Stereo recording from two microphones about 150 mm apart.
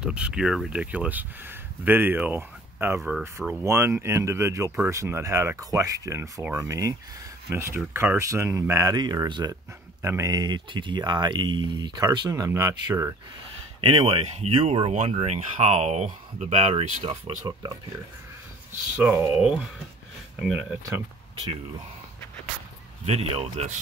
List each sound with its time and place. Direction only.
0.0 s speech: 5° right (ahead or behind)
3.0 s speech: 5° right (ahead or behind)
3.6 s speech: 15° right (ahead or behind)
13.7 s speech: 40° right (ahead or behind)
17.0 s speech: 30° right (ahead or behind)
19.3 s speech: 5° right (ahead or behind)
23.0 s speech: 40° right (ahead or behind)